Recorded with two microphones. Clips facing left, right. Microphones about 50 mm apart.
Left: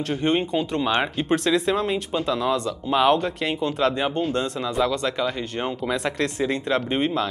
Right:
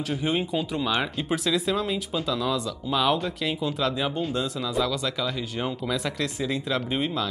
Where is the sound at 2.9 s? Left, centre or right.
Left.